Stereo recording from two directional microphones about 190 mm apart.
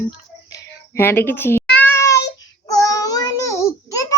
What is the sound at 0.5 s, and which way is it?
Meow, 10° left (ahead or behind).